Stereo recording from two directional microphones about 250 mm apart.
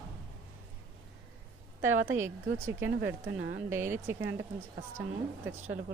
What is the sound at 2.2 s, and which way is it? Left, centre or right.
Speech, centre.